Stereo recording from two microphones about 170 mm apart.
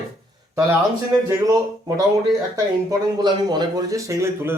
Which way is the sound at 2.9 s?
25° right (ahead or behind).